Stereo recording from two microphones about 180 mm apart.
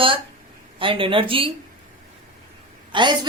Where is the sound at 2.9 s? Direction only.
25° right (ahead or behind).